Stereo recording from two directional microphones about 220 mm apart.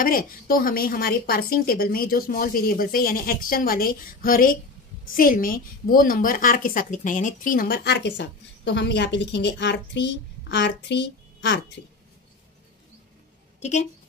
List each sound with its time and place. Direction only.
0.0 s a woman's voice: 40° left (ahead or behind)
13.6 s a woman's voice: 30° left (ahead or behind)